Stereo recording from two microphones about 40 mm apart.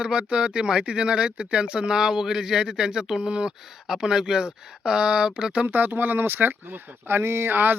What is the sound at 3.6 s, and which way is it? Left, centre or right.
Speech, centre.